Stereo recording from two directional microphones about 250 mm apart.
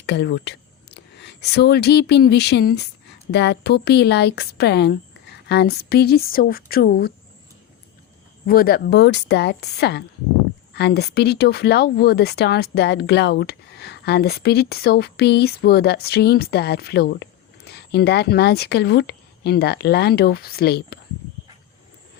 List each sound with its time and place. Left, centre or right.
0.0 s speech: left
8.4 s speech: left